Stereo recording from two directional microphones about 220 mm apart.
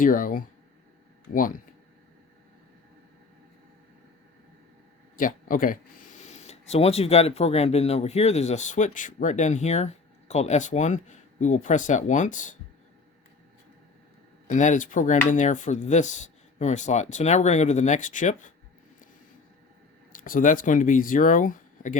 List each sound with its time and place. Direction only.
0.0 s speech: 40° left (ahead or behind)
5.1 s speech: 40° left (ahead or behind)
14.4 s speech: 35° left (ahead or behind)
20.1 s speech: 40° left (ahead or behind)